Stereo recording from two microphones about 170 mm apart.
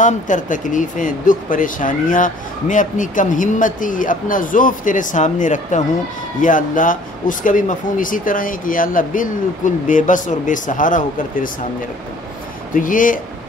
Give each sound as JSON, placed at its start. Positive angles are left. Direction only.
{"t": 0.0, "sound": "speech", "side_deg": 50}
{"t": 12.7, "sound": "speech", "side_deg": 50}